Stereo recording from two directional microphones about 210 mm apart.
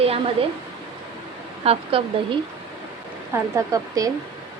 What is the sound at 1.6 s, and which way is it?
Speech, 30° right (ahead or behind).